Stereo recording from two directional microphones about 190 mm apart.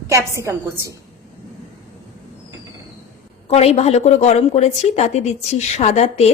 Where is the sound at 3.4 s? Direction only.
35° left (ahead or behind).